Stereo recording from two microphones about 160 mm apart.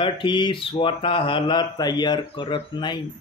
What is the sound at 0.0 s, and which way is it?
Speech, 30° left (ahead or behind).